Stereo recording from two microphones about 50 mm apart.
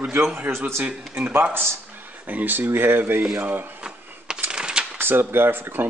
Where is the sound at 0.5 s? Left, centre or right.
Right.